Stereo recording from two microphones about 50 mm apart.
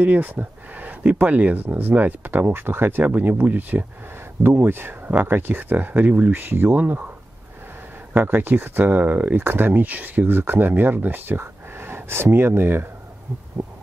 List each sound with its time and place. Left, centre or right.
0.0 s speech: right
2.5 s speech: right
3.0 s speech: right
4.6 s speech: right
6.4 s speech: right
8.1 s speech: right
13.6 s speech: right